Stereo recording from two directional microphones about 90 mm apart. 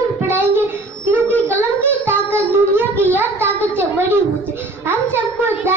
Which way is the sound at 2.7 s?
25° right (ahead or behind).